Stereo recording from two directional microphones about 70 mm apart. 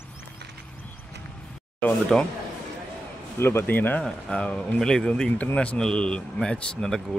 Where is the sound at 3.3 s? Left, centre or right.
Left.